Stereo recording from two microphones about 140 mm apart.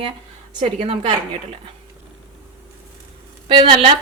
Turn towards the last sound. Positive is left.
turn(degrees=-40)  # may be behind; listen again after turning